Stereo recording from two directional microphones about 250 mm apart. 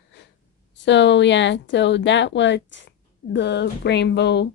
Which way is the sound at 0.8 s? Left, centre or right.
Left.